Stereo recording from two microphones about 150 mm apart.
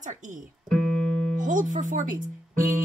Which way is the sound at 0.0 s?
55° right (ahead or behind).